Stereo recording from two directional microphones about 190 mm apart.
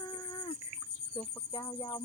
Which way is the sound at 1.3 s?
20° left (ahead or behind).